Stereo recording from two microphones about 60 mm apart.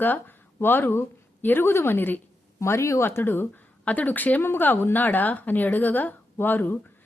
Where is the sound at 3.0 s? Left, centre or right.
Left.